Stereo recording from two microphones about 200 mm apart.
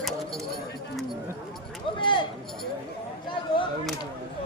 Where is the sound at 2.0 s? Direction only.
25° left (ahead or behind).